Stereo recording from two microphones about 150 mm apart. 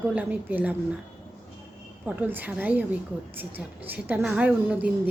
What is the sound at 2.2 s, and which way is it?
A woman's voice, 10° right (ahead or behind).